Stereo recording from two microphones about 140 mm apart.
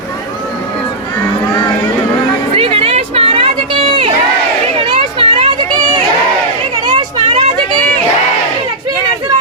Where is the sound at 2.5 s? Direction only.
45° right (ahead or behind).